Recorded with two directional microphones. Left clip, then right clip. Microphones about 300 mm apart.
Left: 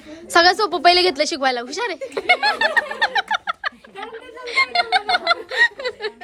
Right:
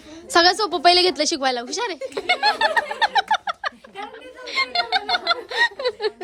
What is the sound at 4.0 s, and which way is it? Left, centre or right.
Snicker, centre.